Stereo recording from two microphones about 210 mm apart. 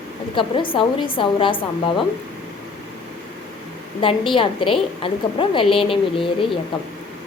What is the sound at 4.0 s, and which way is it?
A woman's voice, 25° left (ahead or behind).